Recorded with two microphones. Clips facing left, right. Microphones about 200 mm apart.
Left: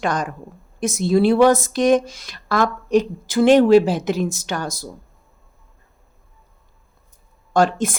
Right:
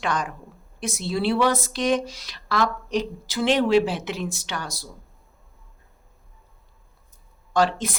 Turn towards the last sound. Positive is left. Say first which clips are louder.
# left 4 dB
turn(degrees=50)  # may be behind; listen again after turning